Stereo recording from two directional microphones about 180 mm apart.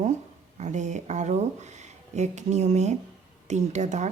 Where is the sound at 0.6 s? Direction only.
40° right (ahead or behind).